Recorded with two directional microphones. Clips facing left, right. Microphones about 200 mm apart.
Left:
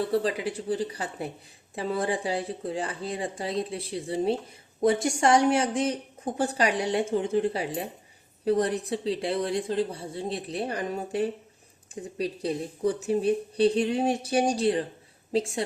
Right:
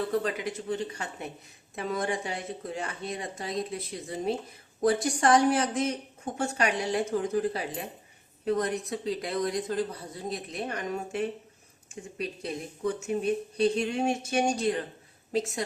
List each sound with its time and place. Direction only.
0.0 s a woman's voice: 30° left (ahead or behind)